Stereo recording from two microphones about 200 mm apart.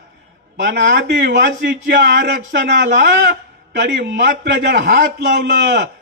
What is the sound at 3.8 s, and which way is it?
A man's voice, 55° right (ahead or behind).